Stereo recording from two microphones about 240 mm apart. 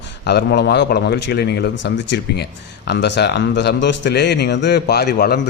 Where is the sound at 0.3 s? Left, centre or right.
Left.